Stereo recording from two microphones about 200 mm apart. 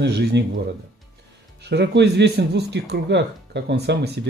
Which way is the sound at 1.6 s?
60° right (ahead or behind).